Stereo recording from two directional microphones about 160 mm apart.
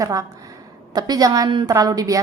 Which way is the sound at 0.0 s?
20° right (ahead or behind).